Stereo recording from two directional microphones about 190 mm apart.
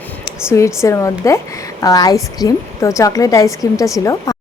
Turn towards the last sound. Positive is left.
turn(degrees=15)  # may be behind; listen again after turning